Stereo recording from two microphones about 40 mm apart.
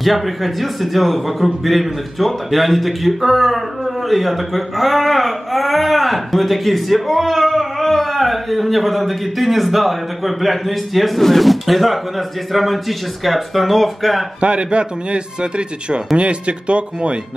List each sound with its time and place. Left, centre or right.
0.0 s a man's voice: centre
14.4 s speech: right